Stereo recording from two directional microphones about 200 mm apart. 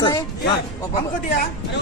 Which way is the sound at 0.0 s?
25° left (ahead or behind).